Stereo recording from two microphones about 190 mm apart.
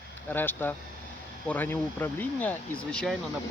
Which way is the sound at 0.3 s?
10° left (ahead or behind).